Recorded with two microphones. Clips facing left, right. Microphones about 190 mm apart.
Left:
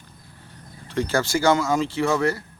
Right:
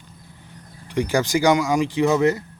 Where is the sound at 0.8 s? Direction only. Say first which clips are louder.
Right 2 dB; 15° right (ahead or behind).